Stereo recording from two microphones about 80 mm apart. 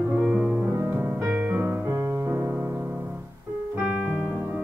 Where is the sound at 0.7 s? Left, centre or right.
Right.